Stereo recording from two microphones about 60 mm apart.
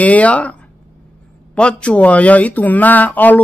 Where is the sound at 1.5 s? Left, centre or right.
Centre.